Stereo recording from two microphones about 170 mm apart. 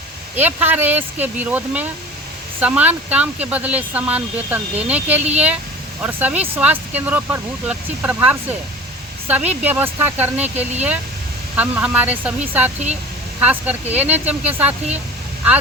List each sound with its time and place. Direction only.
0.3 s speech: 10° right (ahead or behind)